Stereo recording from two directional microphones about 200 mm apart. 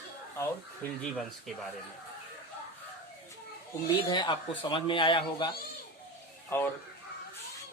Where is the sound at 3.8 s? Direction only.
20° left (ahead or behind).